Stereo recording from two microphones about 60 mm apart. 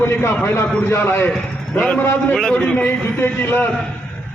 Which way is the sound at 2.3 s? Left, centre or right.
Centre.